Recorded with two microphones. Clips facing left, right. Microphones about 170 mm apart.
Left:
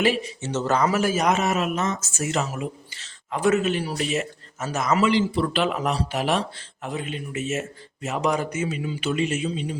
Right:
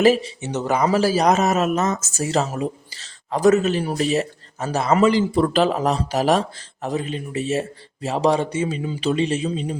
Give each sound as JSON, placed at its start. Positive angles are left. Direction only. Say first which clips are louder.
{"t": 0.0, "sound": "a man's voice", "louder": "right 6 dB", "side_deg": -40}
{"t": 0.4, "sound": "speech", "louder": "right 1 dB", "side_deg": -15}
{"t": 0.9, "sound": "a man's voice", "louder": "right 4 dB", "side_deg": -30}
{"t": 4.9, "sound": "a man's voice", "louder": "right 4 dB", "side_deg": -45}